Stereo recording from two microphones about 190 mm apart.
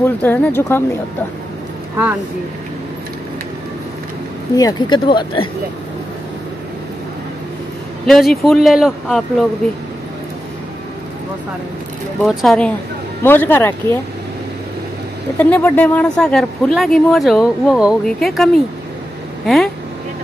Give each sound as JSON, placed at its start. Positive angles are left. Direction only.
{"t": 0.0, "sound": "speech", "side_deg": 10}
{"t": 4.6, "sound": "speech", "side_deg": 20}
{"t": 8.1, "sound": "speech", "side_deg": 0}
{"t": 12.2, "sound": "speech", "side_deg": 0}
{"t": 15.3, "sound": "speech", "side_deg": 10}